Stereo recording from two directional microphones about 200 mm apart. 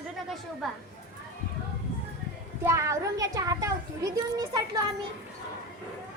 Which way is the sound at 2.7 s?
15° right (ahead or behind).